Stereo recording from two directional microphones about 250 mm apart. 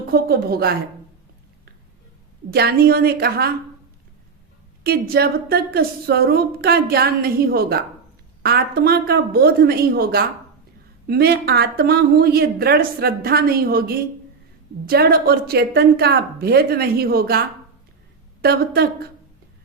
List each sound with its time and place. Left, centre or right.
0.1 s speech: right
2.5 s speech: right
4.8 s speech: right
18.4 s speech: right